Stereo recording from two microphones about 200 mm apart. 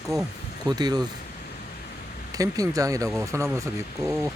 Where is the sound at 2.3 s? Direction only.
15° right (ahead or behind).